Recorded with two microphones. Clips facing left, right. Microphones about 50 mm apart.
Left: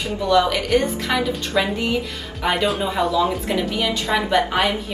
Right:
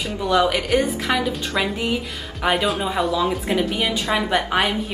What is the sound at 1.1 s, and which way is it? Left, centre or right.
Speech, centre.